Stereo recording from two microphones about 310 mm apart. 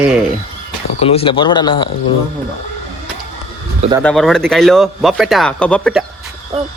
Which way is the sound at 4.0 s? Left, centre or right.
Centre.